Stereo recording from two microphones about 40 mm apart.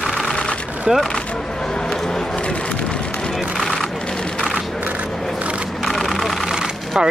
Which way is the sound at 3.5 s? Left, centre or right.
Centre.